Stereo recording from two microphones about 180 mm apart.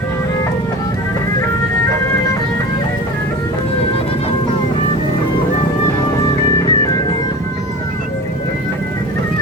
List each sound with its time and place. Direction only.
6.6 s music: 20° left (ahead or behind)